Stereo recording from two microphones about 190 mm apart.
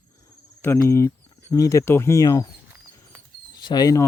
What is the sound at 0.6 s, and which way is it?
Speech, 15° left (ahead or behind).